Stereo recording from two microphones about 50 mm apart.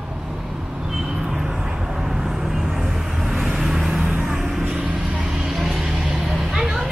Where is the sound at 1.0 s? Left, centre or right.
Centre.